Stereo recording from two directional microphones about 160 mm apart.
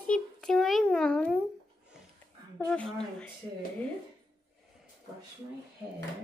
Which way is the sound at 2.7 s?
5° left (ahead or behind).